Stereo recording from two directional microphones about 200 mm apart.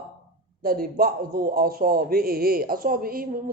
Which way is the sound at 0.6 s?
45° right (ahead or behind).